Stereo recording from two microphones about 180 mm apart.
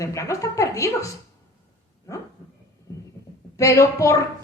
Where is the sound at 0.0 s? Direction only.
15° left (ahead or behind).